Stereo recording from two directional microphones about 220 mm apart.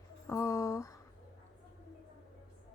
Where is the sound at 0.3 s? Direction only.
15° left (ahead or behind).